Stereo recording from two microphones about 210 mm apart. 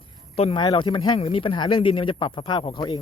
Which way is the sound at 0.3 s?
25° left (ahead or behind).